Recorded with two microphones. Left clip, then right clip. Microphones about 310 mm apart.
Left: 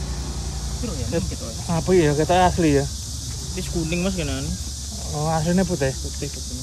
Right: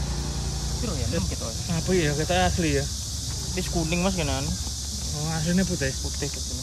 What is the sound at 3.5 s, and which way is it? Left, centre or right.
Speech, centre.